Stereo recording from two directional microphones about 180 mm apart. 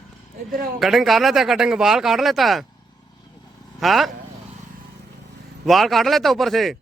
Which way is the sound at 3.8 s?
Centre (ahead or behind).